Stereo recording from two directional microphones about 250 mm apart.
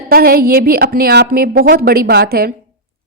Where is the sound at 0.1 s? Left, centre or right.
Right.